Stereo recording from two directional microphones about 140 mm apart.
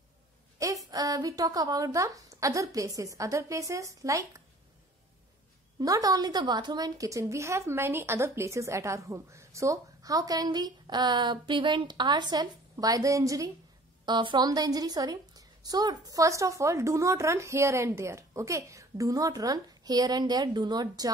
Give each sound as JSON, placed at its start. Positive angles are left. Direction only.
{"t": 0.8, "sound": "a woman's voice", "side_deg": -25}
{"t": 5.8, "sound": "a woman's voice", "side_deg": -25}